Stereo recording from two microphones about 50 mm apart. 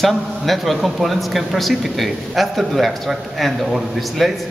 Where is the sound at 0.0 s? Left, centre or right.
Centre.